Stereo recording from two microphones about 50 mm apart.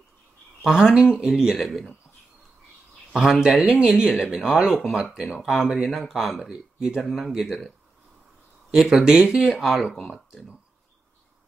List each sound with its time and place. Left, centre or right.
0.6 s speech: centre
3.1 s speech: centre
8.7 s speech: centre